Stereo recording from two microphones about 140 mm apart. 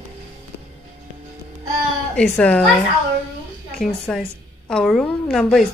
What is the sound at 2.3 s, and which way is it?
Speech, 10° left (ahead or behind).